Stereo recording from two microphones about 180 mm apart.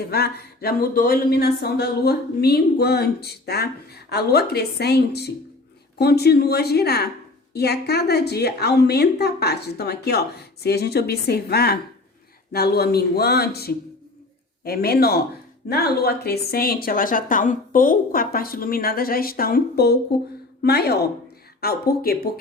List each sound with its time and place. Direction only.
0.1 s speech: 60° left (ahead or behind)